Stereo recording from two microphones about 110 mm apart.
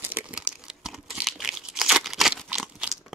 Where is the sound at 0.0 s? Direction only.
10° right (ahead or behind).